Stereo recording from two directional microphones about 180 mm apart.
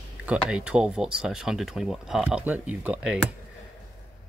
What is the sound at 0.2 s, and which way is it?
Speech, 5° right (ahead or behind).